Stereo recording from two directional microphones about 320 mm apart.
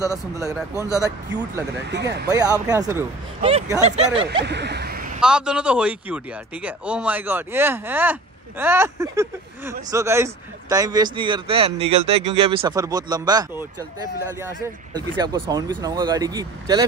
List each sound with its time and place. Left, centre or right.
0.1 s a man's voice: centre
1.8 s speech: right
2.2 s a man's voice: centre
4.3 s a sound: right
5.2 s a man's voice: centre
15.1 s a man's voice: centre